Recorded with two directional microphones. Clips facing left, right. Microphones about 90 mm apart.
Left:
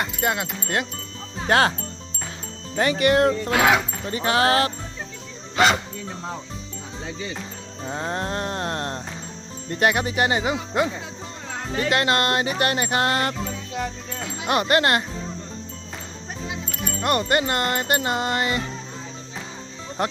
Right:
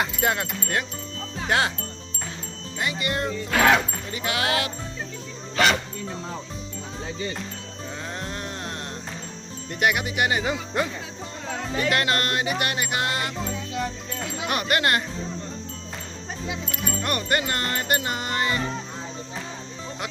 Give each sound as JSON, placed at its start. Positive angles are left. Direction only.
{"t": 0.0, "sound": "speech", "side_deg": 0}
{"t": 1.5, "sound": "speech", "side_deg": 35}
{"t": 2.7, "sound": "speech", "side_deg": 60}
{"t": 3.5, "sound": "speech", "side_deg": 15}
{"t": 4.0, "sound": "speech", "side_deg": 35}
{"t": 7.9, "sound": "speech", "side_deg": 40}
{"t": 9.8, "sound": "wind chime", "side_deg": 35}
{"t": 11.8, "sound": "speech", "side_deg": 25}
{"t": 14.4, "sound": "wind chime", "side_deg": 30}
{"t": 17.0, "sound": "wind chime", "side_deg": 25}
{"t": 20.0, "sound": "speech", "side_deg": 40}